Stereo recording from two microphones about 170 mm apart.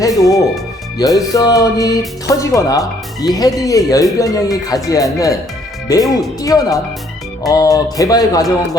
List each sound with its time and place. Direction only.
0.0 s speech: 20° left (ahead or behind)